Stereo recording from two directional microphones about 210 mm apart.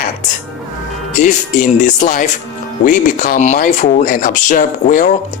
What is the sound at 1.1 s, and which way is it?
Speech, 35° left (ahead or behind).